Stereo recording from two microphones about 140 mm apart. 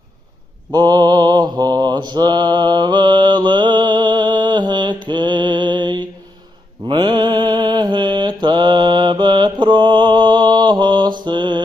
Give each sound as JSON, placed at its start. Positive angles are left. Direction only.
{"t": 0.7, "sound": "mantra", "side_deg": -30}